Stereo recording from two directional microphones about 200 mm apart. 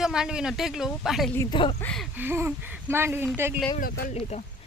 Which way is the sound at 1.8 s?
5° left (ahead or behind).